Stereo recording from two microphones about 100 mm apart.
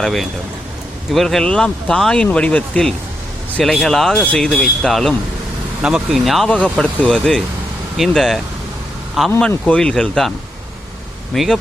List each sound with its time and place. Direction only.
0.0 s speech: centre (ahead or behind)
6.5 s speech: 15° left (ahead or behind)
11.3 s speech: centre (ahead or behind)